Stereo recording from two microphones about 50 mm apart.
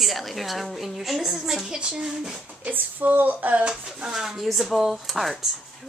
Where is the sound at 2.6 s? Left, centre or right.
Right.